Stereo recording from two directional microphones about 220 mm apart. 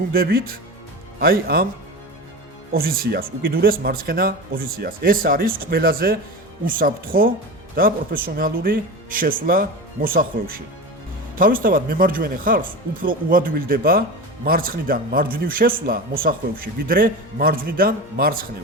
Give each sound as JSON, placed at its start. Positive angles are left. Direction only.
{"t": 0.1, "sound": "speech", "side_deg": -45}
{"t": 2.7, "sound": "speech", "side_deg": -40}